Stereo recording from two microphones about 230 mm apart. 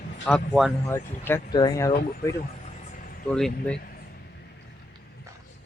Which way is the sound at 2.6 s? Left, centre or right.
Left.